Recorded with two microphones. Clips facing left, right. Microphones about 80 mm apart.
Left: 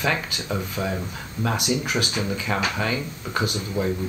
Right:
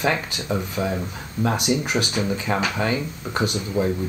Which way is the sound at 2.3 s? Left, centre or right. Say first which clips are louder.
Right 2 dB; right.